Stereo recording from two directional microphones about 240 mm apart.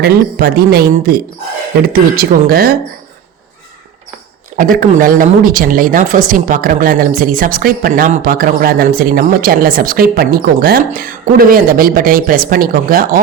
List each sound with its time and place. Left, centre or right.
0.0 s speech: right
4.5 s speech: right